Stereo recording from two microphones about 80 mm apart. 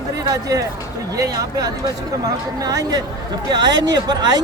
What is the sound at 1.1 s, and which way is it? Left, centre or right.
Speech, right.